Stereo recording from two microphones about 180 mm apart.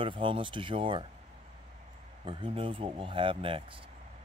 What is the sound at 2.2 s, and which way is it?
Speech, 30° right (ahead or behind).